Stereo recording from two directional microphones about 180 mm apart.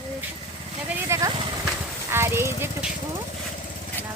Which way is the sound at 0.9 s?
15° right (ahead or behind).